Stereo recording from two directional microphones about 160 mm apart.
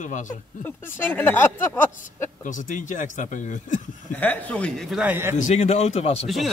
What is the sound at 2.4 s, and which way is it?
Speech, 55° left (ahead or behind).